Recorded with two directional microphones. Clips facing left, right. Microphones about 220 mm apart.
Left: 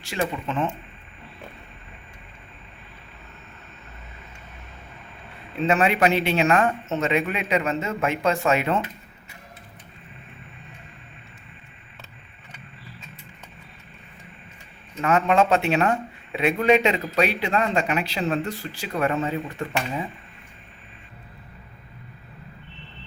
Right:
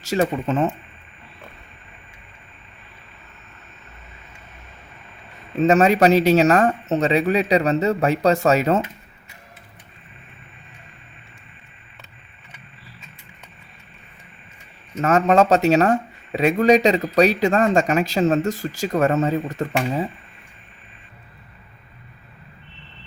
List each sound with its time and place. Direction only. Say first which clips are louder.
0.0 s speech: right 7 dB; 40° right (ahead or behind)
5.5 s speech: right 6 dB; 40° right (ahead or behind)
15.0 s speech: right 4 dB; 40° right (ahead or behind)